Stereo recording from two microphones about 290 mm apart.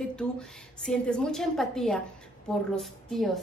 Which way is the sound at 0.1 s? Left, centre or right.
Centre.